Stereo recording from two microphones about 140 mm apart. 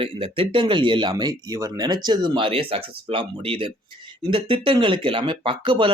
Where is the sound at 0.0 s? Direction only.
40° right (ahead or behind).